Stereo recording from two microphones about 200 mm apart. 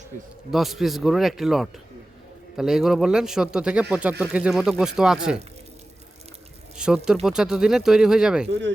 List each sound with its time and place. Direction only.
0.1 s a man's voice: 40° right (ahead or behind)
0.5 s speech: centre (ahead or behind)
6.7 s speech: 5° right (ahead or behind)